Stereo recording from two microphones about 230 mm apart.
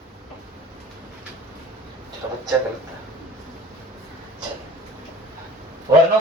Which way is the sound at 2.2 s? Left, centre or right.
Centre.